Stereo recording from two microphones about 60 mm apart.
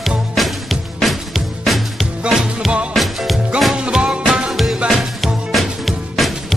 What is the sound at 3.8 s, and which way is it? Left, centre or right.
Music, centre.